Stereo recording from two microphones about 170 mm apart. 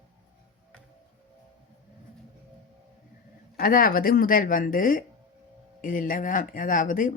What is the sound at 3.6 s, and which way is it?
Speech, 55° left (ahead or behind).